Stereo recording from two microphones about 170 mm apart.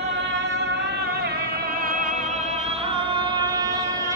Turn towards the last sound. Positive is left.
turn(degrees=-20)  # may be behind; listen again after turning